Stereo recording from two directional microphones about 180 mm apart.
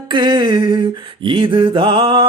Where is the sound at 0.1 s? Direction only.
25° right (ahead or behind).